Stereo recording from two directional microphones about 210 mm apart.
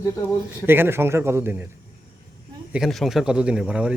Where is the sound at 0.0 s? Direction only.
15° left (ahead or behind).